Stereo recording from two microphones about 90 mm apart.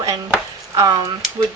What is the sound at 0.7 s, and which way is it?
Speech, 40° right (ahead or behind).